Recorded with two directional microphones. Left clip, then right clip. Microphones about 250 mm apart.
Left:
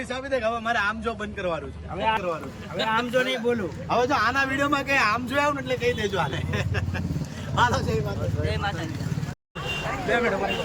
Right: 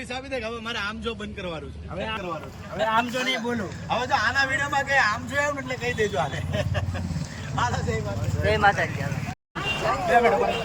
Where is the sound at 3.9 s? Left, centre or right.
Centre.